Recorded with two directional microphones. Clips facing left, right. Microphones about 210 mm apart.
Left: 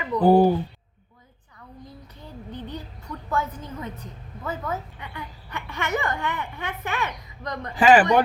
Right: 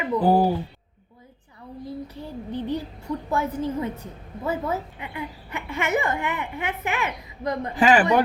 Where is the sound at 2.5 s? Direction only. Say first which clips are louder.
Right 8 dB; 10° right (ahead or behind).